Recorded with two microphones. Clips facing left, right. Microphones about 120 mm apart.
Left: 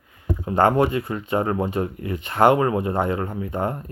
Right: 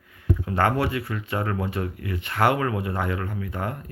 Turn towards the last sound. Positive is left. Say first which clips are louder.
# left 5 dB
turn(degrees=25)  # may be behind; listen again after turning